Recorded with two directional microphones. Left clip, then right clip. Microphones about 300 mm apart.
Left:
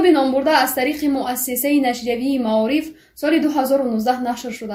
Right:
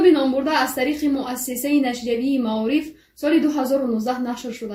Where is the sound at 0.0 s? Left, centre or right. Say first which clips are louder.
Left 2 dB; left.